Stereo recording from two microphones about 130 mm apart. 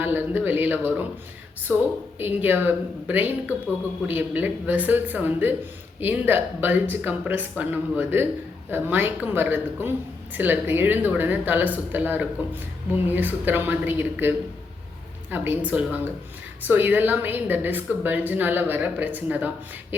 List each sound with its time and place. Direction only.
0.0 s a woman's voice: 15° right (ahead or behind)